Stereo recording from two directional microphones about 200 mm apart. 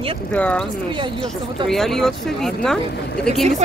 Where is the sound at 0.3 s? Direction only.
5° left (ahead or behind).